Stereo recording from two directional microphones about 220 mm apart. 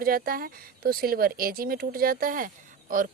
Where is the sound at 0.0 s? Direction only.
40° right (ahead or behind).